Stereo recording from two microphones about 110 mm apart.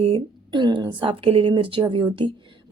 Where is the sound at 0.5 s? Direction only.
45° right (ahead or behind).